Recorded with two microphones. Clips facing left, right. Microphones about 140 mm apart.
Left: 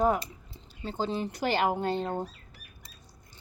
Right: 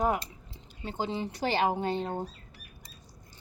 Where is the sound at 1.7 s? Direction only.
15° right (ahead or behind).